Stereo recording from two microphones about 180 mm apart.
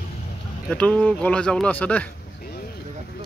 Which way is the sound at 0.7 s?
5° left (ahead or behind).